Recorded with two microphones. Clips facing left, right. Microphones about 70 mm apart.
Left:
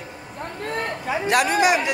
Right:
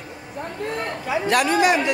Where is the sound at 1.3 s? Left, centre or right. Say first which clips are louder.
Even; centre.